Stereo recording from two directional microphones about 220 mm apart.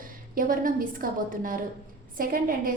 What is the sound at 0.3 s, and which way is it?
A woman's voice, 40° right (ahead or behind).